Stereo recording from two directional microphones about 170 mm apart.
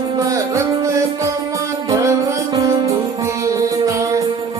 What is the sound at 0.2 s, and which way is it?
Music, 20° right (ahead or behind).